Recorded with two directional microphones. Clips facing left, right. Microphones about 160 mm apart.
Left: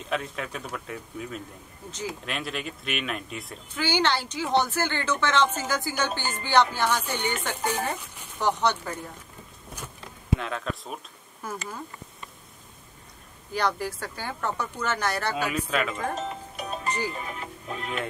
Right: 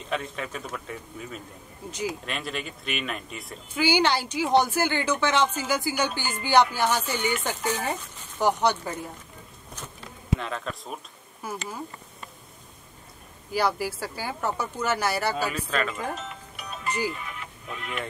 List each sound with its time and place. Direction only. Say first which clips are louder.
0.0 s speech: even; centre (ahead or behind)
3.7 s speech: right 3 dB; 10° right (ahead or behind)
10.4 s speech: left 1 dB; centre (ahead or behind)
13.5 s speech: right 2 dB; 5° right (ahead or behind)
15.5 s speech: left 1 dB; 5° left (ahead or behind)
16.2 s music: left 6 dB; 35° left (ahead or behind)